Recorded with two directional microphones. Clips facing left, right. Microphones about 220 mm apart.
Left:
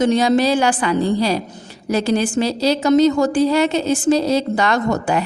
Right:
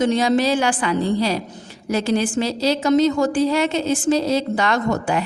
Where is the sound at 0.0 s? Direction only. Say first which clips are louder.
Left 2 dB; 40° left (ahead or behind).